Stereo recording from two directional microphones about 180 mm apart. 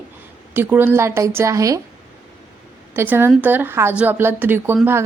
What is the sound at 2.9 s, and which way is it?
A woman's voice, 10° right (ahead or behind).